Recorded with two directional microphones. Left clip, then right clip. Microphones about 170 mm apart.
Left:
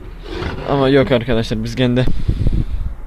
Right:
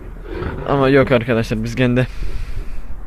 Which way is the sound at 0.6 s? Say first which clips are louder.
Even; 20° left (ahead or behind).